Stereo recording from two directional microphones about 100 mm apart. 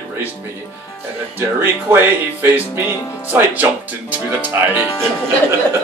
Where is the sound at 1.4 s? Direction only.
20° right (ahead or behind).